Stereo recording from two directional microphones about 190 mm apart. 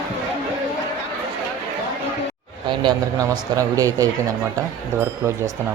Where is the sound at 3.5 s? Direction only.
20° right (ahead or behind).